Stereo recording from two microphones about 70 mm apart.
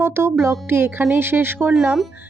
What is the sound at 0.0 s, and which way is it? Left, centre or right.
Speech, right.